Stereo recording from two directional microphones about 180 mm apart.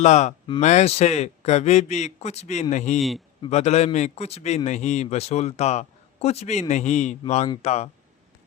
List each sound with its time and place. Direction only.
0.0 s a man's voice: 40° left (ahead or behind)